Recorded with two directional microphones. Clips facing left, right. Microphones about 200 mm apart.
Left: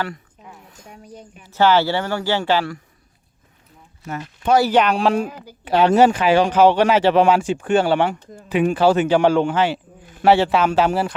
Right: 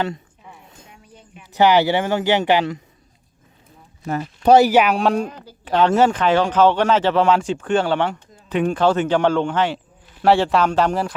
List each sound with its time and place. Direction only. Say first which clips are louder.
1.0 s a sound: left 6 dB; 40° left (ahead or behind)
1.5 s speech: right 1 dB; 15° right (ahead or behind)
4.0 s speech: right 6 dB; 35° right (ahead or behind)
4.6 s speech: right 1 dB; 10° right (ahead or behind)